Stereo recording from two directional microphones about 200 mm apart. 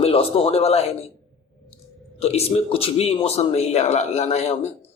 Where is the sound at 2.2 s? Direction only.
30° left (ahead or behind).